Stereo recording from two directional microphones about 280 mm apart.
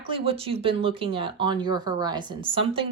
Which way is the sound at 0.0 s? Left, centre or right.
Centre.